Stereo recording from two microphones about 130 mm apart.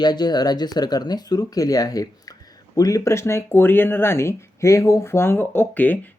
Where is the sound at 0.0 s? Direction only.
35° left (ahead or behind).